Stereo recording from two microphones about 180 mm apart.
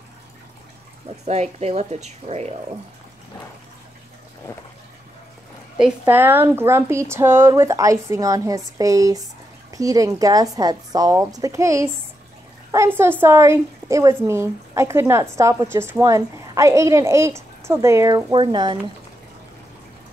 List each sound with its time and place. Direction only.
1.2 s speech: 40° right (ahead or behind)
5.8 s a woman's voice: 10° right (ahead or behind); by 18.8 s 25° right (ahead or behind)